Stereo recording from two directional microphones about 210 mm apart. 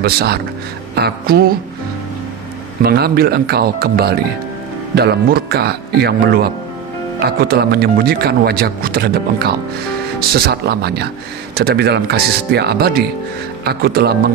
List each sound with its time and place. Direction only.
0.0 s speech: 50° right (ahead or behind)
2.8 s speech: 50° right (ahead or behind)